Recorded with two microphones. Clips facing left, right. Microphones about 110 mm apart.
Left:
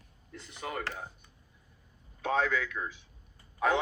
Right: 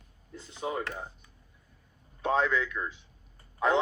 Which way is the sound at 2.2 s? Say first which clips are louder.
Right 2 dB; 30° right (ahead or behind).